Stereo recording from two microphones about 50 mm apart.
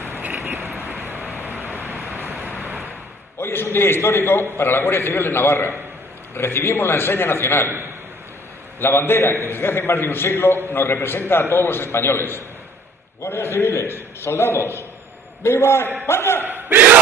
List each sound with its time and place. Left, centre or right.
0.0 s vehicle: right
2.3 s vehicle: left
3.3 s a man's voice: left
8.7 s a man's voice: left
16.4 s battle cry: right